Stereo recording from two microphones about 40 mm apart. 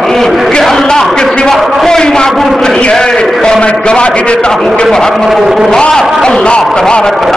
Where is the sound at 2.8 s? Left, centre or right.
Centre.